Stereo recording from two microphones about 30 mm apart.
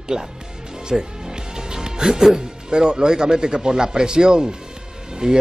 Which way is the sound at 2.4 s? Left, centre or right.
Right.